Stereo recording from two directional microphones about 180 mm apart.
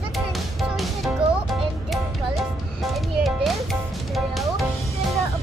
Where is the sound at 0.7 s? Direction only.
Centre (ahead or behind).